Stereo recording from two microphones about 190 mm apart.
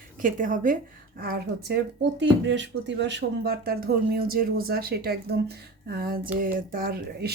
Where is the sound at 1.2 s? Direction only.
55° right (ahead or behind).